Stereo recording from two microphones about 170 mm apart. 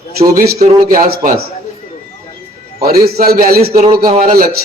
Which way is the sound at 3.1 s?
60° right (ahead or behind).